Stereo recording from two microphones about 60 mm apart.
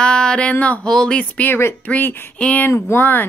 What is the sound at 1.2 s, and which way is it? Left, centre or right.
Speech, left.